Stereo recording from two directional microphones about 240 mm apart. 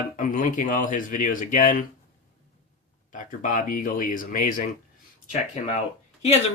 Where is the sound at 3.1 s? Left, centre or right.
Left.